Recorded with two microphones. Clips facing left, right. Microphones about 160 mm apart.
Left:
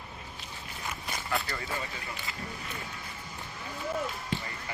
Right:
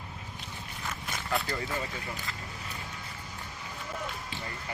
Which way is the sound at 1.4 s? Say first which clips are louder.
Right 2 dB; centre (ahead or behind).